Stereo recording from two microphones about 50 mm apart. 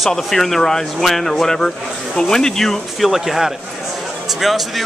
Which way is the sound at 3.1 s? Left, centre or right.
Centre.